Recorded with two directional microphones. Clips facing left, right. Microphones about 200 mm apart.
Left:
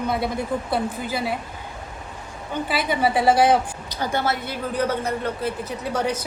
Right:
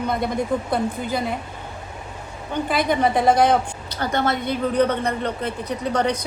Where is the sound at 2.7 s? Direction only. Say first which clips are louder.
Right 2 dB; 5° left (ahead or behind).